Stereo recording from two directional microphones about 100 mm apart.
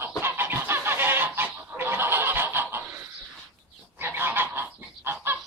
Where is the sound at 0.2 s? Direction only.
20° right (ahead or behind).